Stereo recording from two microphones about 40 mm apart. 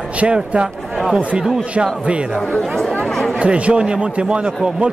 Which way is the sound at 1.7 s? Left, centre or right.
Right.